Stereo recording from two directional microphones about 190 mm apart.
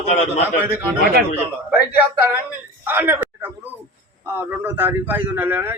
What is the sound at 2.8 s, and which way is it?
A man's voice, 10° right (ahead or behind).